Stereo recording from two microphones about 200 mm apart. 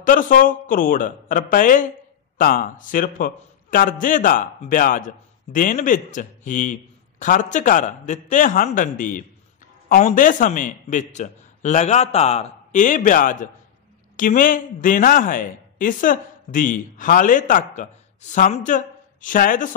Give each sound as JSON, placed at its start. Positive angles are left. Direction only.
{"t": 0.0, "sound": "a man's voice", "side_deg": 40}